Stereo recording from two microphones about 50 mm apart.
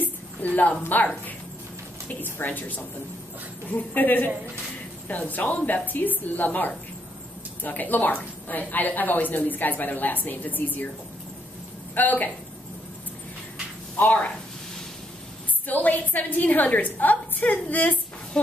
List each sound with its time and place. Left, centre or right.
0.0 s a sound: left
0.8 s a woman's voice: left
11.9 s a woman's voice: left
13.9 s speech: left
15.6 s a woman's voice: left